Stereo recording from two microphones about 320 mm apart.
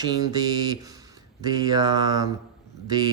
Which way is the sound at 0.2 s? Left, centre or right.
Centre.